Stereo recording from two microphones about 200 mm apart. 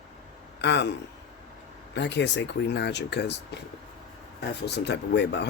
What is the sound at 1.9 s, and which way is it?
Speech, 60° left (ahead or behind).